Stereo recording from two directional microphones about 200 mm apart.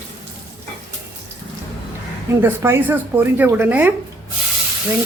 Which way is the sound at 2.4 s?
10° right (ahead or behind).